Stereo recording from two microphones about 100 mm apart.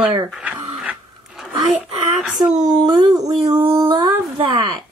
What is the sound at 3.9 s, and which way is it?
Speech, 50° right (ahead or behind).